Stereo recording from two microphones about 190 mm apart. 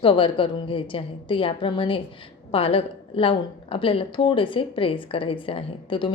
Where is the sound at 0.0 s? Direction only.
30° left (ahead or behind).